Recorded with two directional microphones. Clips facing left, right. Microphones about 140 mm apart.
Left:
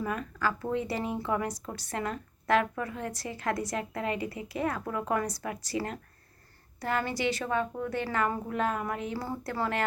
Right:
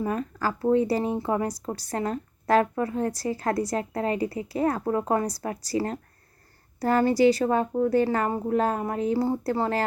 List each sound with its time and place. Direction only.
0.0 s speech: 35° right (ahead or behind)